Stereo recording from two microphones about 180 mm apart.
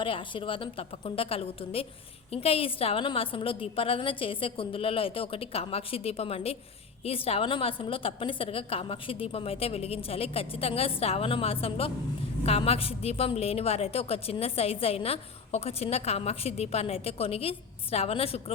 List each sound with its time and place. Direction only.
0.0 s a woman's voice: 30° left (ahead or behind)